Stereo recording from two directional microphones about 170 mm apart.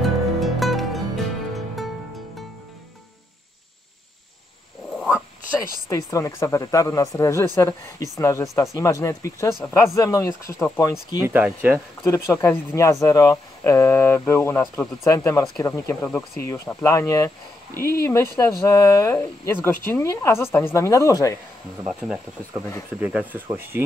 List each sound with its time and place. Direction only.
0.0 s music: centre (ahead or behind)
4.9 s a sound: 5° left (ahead or behind)
5.9 s speech: 20° left (ahead or behind)
11.1 s speech: 10° right (ahead or behind)
12.0 s speech: 15° left (ahead or behind)
21.8 s speech: centre (ahead or behind)